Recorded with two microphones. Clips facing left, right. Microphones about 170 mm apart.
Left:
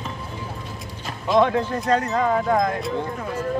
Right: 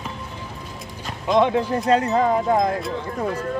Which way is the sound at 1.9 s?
30° right (ahead or behind).